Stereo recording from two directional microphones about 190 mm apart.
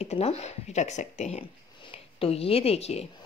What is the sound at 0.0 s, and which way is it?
Speech, 35° left (ahead or behind).